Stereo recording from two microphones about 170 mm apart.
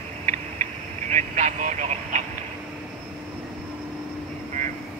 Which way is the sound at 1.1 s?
45° right (ahead or behind).